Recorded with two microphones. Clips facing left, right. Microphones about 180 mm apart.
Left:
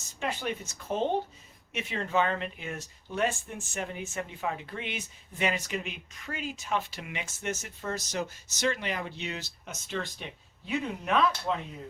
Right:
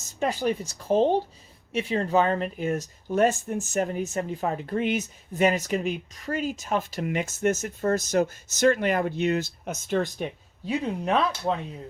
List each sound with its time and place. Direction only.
0.2 s speech: 40° right (ahead or behind)
11.0 s speech: 35° right (ahead or behind)